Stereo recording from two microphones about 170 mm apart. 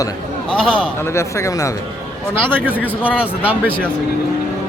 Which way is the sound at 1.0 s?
15° left (ahead or behind).